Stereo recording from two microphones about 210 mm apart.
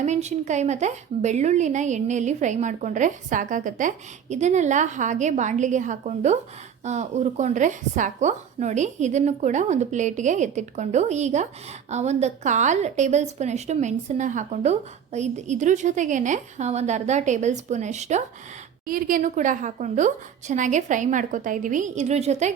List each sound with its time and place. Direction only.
0.0 s a woman's voice: 30° right (ahead or behind)